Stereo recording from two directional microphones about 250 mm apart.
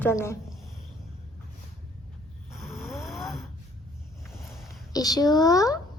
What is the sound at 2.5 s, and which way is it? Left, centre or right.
Snoring, centre.